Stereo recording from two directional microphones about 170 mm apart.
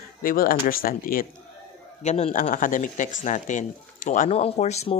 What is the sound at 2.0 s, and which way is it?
Speech, 40° left (ahead or behind).